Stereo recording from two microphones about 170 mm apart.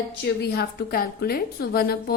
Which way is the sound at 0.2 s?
70° left (ahead or behind).